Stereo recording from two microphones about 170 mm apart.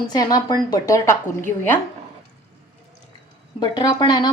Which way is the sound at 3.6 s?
25° left (ahead or behind).